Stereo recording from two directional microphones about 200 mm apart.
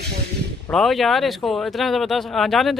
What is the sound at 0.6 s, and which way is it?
Speech, centre (ahead or behind).